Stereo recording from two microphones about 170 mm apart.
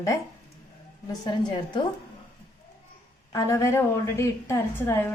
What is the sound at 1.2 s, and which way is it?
Speech, 25° left (ahead or behind).